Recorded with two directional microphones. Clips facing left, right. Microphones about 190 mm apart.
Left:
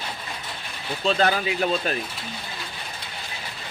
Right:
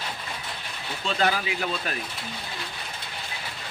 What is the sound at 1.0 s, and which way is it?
Speech, 30° left (ahead or behind).